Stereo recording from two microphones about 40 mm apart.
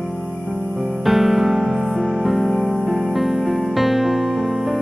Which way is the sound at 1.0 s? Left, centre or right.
Centre.